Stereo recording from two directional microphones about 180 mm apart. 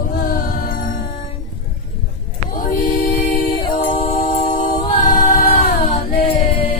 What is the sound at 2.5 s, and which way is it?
Music, 50° left (ahead or behind).